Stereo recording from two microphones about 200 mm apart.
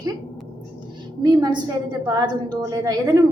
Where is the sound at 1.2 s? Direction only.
20° right (ahead or behind).